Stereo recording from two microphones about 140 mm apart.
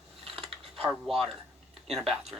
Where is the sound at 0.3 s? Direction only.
45° right (ahead or behind).